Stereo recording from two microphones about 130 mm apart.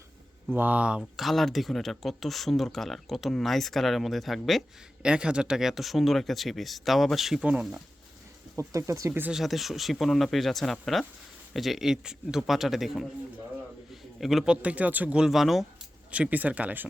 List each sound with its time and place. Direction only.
0.5 s speech: 15° right (ahead or behind)
8.5 s speech: 25° right (ahead or behind)
9.3 s speech: centre (ahead or behind)